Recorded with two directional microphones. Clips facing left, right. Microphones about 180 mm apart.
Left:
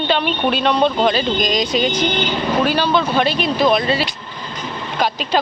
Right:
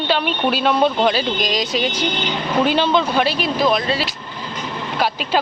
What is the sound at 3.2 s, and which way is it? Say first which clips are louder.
Speech: left 2 dB; 5° right (ahead or behind).